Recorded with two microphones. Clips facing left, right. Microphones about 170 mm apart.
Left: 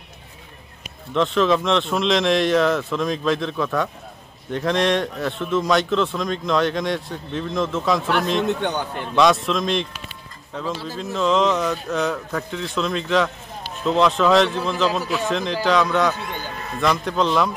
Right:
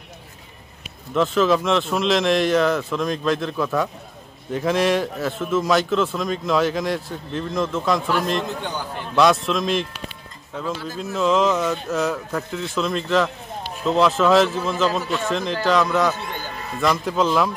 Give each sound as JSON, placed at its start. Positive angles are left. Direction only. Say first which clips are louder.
{"t": 1.1, "sound": "speech", "louder": "even", "side_deg": 0}
{"t": 8.5, "sound": "a man's voice", "louder": "left 5 dB", "side_deg": 65}
{"t": 9.1, "sound": "speech", "louder": "even", "side_deg": 0}